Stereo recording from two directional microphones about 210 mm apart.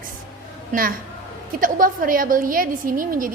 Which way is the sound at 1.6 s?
40° right (ahead or behind).